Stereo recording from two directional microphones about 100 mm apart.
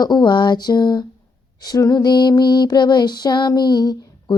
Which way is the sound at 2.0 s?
50° left (ahead or behind).